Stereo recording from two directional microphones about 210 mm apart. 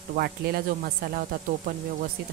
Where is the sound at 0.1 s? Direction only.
50° right (ahead or behind).